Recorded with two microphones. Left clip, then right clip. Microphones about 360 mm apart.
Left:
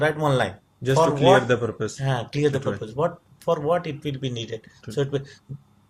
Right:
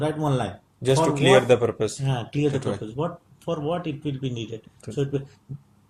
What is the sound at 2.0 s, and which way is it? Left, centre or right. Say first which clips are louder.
Speech: left 2 dB; left.